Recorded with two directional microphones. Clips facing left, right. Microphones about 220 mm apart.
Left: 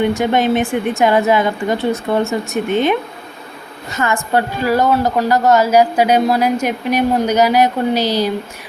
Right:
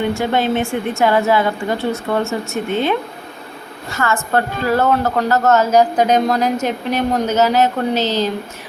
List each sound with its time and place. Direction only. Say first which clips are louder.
0.1 s a woman's voice: left 3 dB; 15° left (ahead or behind)